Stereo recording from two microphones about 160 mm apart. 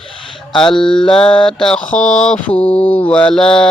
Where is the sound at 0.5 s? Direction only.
5° left (ahead or behind).